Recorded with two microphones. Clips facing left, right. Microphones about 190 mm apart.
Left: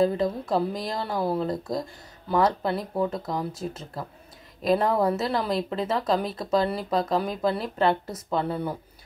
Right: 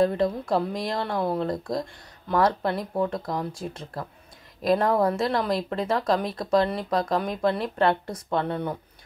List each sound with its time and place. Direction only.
0.0 s speech: centre (ahead or behind)